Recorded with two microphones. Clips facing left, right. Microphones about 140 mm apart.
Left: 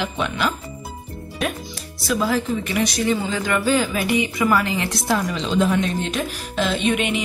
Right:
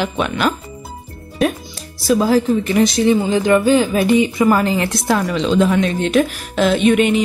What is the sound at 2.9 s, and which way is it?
Speech, 25° right (ahead or behind).